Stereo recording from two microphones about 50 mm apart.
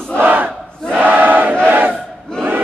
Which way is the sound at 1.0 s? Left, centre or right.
Right.